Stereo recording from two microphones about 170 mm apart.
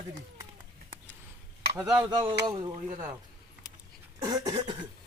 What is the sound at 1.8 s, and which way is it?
Speech, 20° right (ahead or behind).